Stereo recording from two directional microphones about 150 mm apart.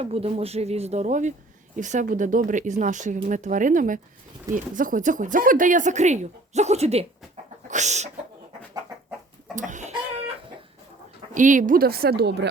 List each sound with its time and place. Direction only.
0.0 s speech: 40° right (ahead or behind)
7.7 s chicken: 50° right (ahead or behind)
9.6 s chicken: 55° right (ahead or behind)
11.3 s a woman's voice: 60° right (ahead or behind); by 12.4 s 90° right